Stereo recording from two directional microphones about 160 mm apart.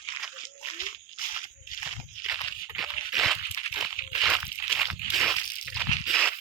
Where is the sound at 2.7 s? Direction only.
Centre (ahead or behind).